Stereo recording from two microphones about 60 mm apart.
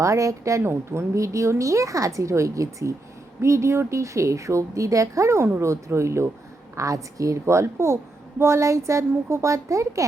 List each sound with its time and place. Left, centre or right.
0.0 s a woman's voice: right
0.6 s a woman's voice: right
6.7 s a woman's voice: right